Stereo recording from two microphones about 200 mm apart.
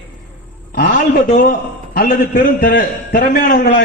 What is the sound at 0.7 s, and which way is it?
A man's voice, 45° left (ahead or behind).